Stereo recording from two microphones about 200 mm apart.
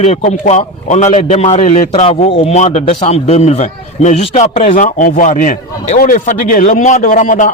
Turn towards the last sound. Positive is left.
turn(degrees=40)  # may be behind; listen again after turning